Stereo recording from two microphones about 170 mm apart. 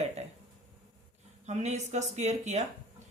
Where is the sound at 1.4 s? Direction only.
45° right (ahead or behind).